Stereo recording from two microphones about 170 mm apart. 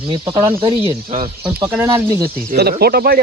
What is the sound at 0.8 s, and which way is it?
Speech, 40° right (ahead or behind).